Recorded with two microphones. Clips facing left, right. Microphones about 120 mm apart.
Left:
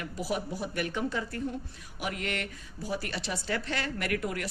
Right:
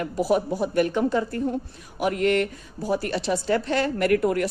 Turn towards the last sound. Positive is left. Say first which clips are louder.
# right 11 dB
turn(degrees=-45)  # may be behind; listen again after turning